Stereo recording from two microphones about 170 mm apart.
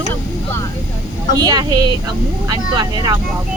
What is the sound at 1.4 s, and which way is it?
Speech, 25° right (ahead or behind).